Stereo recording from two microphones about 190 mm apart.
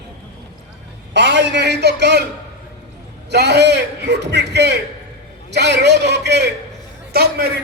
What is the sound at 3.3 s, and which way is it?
A man's voice, 60° right (ahead or behind).